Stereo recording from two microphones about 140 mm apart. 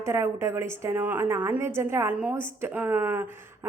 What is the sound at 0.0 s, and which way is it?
Speech, 20° right (ahead or behind).